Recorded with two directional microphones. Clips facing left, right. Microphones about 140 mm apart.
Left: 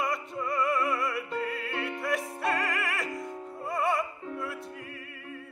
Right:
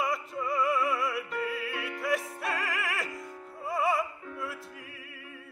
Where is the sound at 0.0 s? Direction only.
Centre (ahead or behind).